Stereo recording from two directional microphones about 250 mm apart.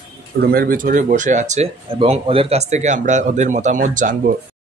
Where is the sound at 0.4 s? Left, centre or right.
Right.